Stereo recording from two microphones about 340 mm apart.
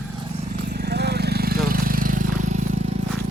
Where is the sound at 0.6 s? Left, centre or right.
Right.